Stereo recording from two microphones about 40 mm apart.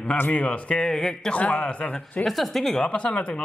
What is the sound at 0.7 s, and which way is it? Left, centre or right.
Speech, centre.